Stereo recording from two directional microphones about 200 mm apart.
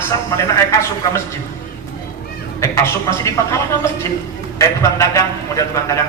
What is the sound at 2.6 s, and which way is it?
A man's voice, 15° left (ahead or behind).